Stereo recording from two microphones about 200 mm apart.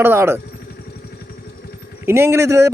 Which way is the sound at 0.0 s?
10° right (ahead or behind).